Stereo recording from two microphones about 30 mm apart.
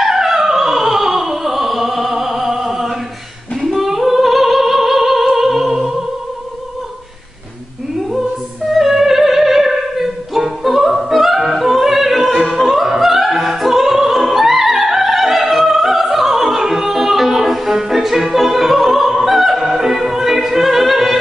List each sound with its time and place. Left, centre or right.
0.0 s opera: centre
2.6 s music: centre
8.7 s opera: centre
15.5 s music: centre
17.7 s music: centre
18.0 s opera: centre